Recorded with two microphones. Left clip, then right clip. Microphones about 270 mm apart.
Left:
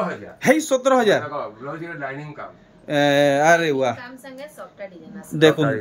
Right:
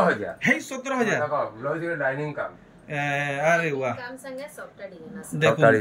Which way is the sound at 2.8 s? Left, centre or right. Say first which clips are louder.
Left 10 dB; left.